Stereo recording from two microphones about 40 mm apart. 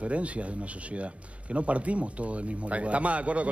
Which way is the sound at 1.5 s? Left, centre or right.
Right.